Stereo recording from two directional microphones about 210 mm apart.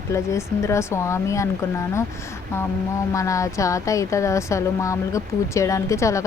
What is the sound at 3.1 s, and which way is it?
A woman's voice, 15° left (ahead or behind).